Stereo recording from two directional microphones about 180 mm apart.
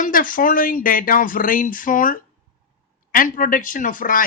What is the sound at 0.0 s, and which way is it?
Speech, 50° left (ahead or behind).